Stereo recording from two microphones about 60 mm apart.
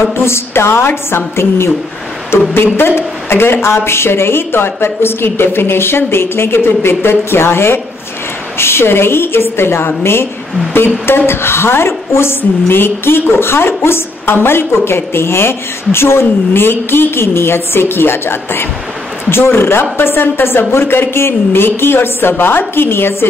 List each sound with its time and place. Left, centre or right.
0.2 s a woman's voice: left